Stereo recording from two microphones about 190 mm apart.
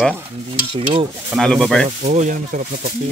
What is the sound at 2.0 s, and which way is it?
Speech, 40° right (ahead or behind).